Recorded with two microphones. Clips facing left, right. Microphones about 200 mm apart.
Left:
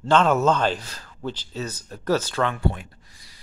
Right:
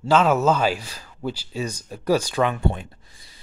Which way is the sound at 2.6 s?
25° right (ahead or behind).